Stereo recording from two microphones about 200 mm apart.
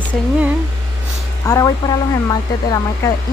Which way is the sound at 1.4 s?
20° left (ahead or behind).